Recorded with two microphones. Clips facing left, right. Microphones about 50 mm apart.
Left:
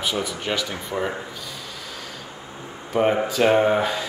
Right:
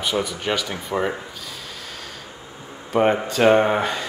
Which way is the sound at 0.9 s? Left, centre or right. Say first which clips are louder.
Right 3 dB; centre.